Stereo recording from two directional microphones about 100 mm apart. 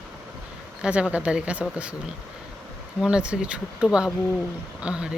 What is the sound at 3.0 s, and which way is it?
Speech, 10° right (ahead or behind).